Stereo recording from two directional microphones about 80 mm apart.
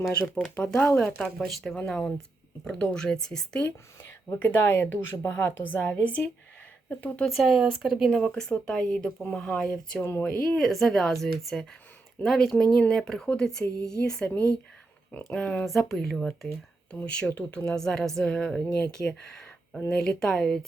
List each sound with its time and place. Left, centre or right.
0.4 s a woman's voice: left
0.9 s speech: centre
4.0 s a woman's voice: left
7.3 s speech: centre
8.1 s speech: centre
10.0 s a woman's voice: left
10.6 s speech: centre
14.3 s a woman's voice: left
15.3 s speech: centre